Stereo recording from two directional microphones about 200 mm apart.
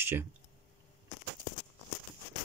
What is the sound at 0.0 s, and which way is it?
Speech, 10° right (ahead or behind).